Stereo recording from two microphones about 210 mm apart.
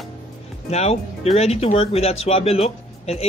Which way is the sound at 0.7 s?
30° left (ahead or behind).